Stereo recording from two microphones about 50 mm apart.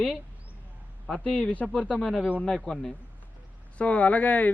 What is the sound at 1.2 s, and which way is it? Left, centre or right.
Speech, left.